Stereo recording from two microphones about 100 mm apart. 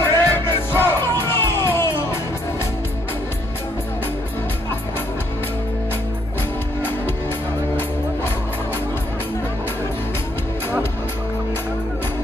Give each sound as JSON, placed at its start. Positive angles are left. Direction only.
{"t": 0.0, "sound": "music", "side_deg": 25}